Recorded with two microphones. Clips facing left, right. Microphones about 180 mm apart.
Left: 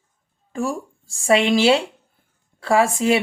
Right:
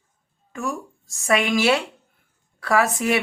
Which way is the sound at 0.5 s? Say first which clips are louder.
Left 4 dB; 30° left (ahead or behind).